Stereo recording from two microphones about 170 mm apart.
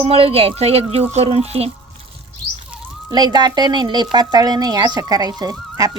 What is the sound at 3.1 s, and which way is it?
Speech, 25° right (ahead or behind).